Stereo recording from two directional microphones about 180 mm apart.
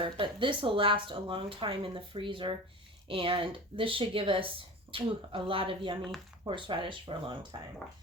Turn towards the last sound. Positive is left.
turn(degrees=-25)  # may be behind; listen again after turning